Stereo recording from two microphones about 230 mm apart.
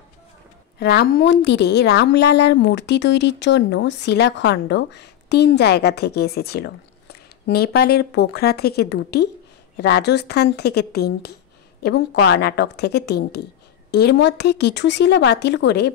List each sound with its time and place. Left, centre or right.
0.7 s a woman's voice: left